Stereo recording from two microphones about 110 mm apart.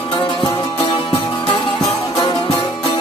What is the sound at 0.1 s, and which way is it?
Music, 45° left (ahead or behind).